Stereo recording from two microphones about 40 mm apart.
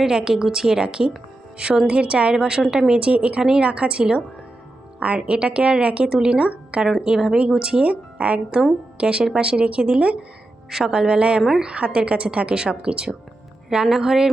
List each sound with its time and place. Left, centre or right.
0.0 s a woman's voice: centre; by 6.1 s right
6.1 s a woman's voice: right
7.0 s a woman's voice: centre
10.8 s a woman's voice: centre
13.7 s a woman's voice: centre